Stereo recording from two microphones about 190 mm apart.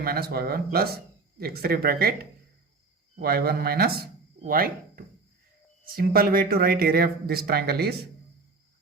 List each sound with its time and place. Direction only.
0.0 s speech: 55° right (ahead or behind)
3.2 s speech: 55° right (ahead or behind)